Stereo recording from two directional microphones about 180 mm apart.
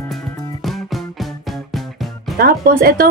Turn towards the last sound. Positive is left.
turn(degrees=-55)  # may be behind; listen again after turning